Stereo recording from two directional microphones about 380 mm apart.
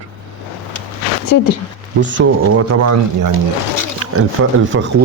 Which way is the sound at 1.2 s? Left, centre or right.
Left.